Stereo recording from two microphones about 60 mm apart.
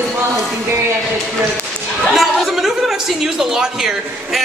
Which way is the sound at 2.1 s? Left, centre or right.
Centre.